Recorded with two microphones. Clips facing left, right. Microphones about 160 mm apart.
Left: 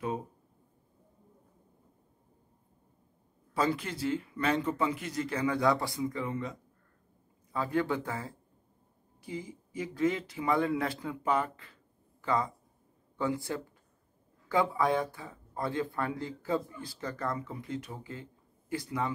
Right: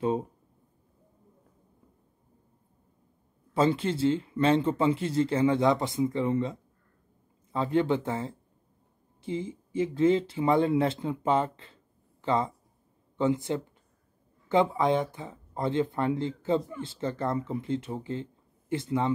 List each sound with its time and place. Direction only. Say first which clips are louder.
3.5 s speech: right 6 dB; 25° right (ahead or behind)